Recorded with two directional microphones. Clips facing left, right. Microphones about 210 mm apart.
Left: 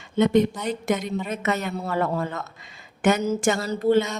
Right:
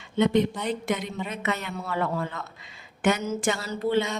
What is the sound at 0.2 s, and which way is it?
Speech, 45° left (ahead or behind).